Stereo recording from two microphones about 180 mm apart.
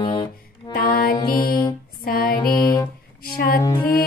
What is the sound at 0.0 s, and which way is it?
Music, 30° left (ahead or behind).